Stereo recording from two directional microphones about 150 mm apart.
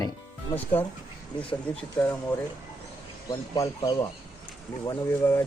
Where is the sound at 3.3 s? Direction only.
25° left (ahead or behind).